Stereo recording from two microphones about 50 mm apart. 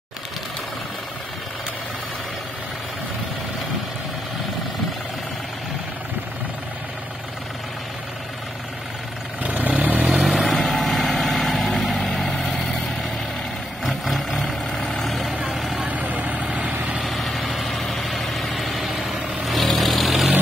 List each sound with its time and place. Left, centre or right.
9.4 s vehicle: right
10.2 s vehicle: centre
10.5 s vehicle: centre
13.8 s vehicle: centre
15.7 s vehicle: right
17.0 s vehicle: centre